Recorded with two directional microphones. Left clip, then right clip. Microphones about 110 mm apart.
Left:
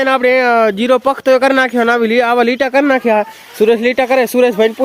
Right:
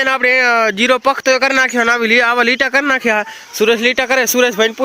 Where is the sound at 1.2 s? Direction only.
20° left (ahead or behind).